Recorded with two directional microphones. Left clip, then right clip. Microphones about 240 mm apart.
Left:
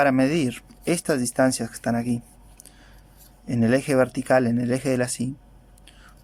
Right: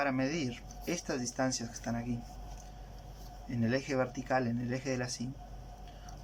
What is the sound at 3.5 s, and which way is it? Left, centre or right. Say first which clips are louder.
Speech: left 12 dB; left.